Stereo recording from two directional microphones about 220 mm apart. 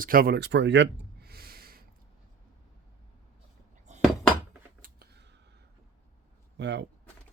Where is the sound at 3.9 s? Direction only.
30° right (ahead or behind).